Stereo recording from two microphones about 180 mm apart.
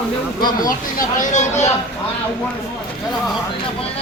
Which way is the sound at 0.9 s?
45° left (ahead or behind).